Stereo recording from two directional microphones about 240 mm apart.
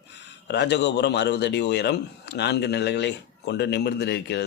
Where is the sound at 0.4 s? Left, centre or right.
Left.